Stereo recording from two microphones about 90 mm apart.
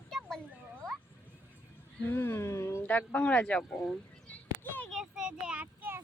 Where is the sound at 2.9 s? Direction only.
15° left (ahead or behind).